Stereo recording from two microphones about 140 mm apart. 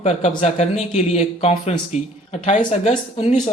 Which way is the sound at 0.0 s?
50° left (ahead or behind).